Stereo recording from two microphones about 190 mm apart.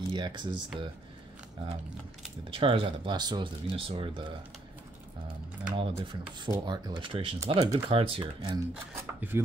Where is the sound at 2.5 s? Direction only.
30° right (ahead or behind).